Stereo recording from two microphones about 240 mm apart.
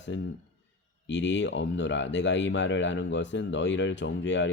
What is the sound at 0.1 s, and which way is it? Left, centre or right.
Speech, left.